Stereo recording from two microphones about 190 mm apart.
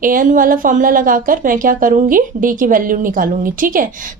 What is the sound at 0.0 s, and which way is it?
Speech, 45° right (ahead or behind).